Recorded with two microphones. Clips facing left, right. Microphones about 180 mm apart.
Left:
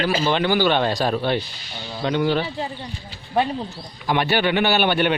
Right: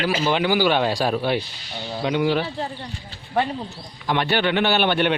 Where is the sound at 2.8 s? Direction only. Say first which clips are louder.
Left 1 dB; 15° left (ahead or behind).